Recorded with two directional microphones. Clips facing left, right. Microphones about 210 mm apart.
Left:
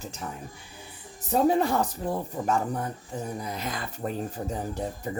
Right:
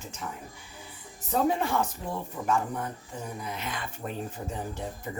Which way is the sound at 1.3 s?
35° left (ahead or behind).